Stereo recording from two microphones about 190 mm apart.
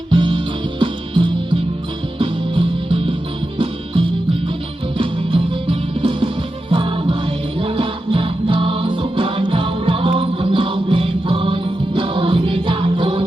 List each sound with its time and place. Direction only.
0.1 s music: 25° right (ahead or behind)
4.9 s music: 30° right (ahead or behind)